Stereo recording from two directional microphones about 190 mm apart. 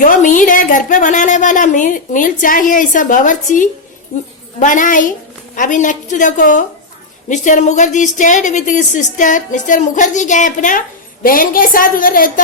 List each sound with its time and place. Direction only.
0.0 s a woman's voice: 45° left (ahead or behind)